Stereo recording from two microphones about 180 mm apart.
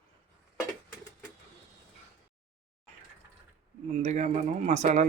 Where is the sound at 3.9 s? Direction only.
40° right (ahead or behind).